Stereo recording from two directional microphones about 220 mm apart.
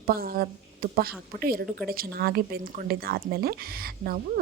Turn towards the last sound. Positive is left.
turn(degrees=-45)  # may be behind; listen again after turning